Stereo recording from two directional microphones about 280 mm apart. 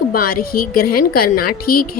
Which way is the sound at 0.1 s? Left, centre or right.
Left.